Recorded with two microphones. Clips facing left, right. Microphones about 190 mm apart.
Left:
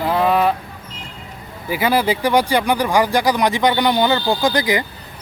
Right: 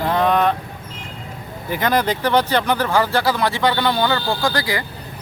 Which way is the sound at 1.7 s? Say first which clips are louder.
Left 2 dB; 5° left (ahead or behind).